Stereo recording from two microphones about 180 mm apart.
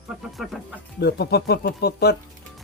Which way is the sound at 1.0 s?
65° left (ahead or behind).